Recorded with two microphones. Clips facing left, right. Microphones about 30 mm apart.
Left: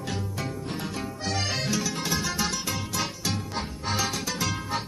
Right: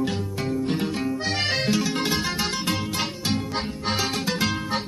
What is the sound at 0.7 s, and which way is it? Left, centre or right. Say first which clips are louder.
Music: right 8 dB; right.